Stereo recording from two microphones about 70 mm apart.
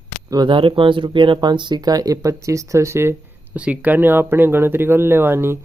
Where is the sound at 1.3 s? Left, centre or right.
Right.